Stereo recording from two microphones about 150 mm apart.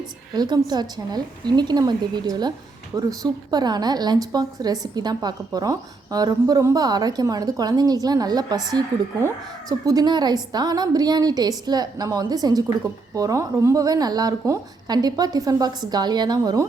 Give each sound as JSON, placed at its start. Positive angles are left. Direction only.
{"t": 0.3, "sound": "a woman's voice", "side_deg": -25}